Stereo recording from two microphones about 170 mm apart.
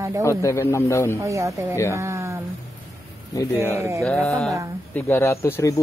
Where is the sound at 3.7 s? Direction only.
15° right (ahead or behind).